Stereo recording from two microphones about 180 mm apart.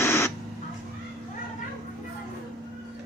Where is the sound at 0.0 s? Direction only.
15° left (ahead or behind).